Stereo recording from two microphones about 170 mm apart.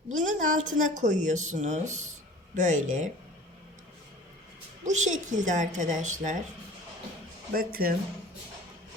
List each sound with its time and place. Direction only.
0.1 s speech: 50° right (ahead or behind)
4.9 s speech: 45° right (ahead or behind)
7.5 s speech: 60° right (ahead or behind)